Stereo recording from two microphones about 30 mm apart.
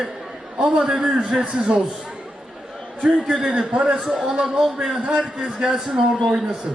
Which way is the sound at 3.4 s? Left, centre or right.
Right.